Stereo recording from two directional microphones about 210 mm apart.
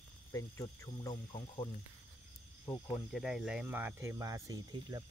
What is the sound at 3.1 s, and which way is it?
Speech, centre (ahead or behind).